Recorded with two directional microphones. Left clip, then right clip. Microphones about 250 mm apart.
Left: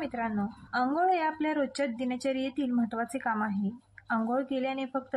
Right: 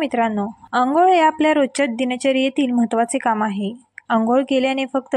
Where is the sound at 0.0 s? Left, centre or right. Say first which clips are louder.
Right 13 dB; right.